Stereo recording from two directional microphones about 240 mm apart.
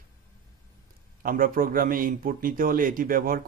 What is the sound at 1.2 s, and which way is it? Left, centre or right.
Speech, right.